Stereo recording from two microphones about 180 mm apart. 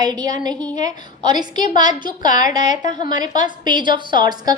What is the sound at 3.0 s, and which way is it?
A woman's voice, 20° right (ahead or behind).